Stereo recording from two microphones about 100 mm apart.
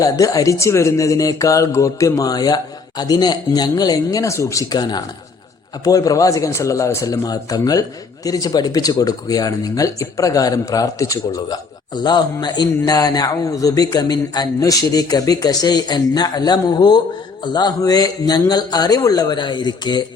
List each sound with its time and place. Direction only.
0.0 s a man's voice: 35° left (ahead or behind)